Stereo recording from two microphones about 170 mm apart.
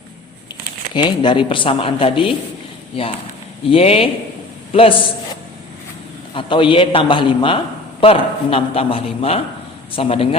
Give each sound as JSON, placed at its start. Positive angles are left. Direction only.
{"t": 0.9, "sound": "a woman's voice", "side_deg": 25}
{"t": 3.7, "sound": "a man's voice", "side_deg": 35}